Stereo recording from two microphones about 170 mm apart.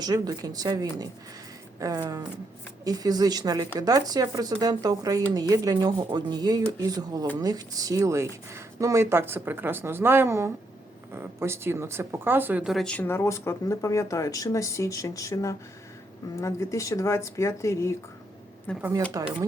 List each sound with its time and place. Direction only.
0.0 s speech: 20° right (ahead or behind); by 17.9 s 15° left (ahead or behind)
18.8 s speech: 15° right (ahead or behind)